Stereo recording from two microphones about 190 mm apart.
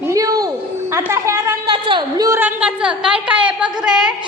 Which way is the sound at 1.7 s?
25° right (ahead or behind).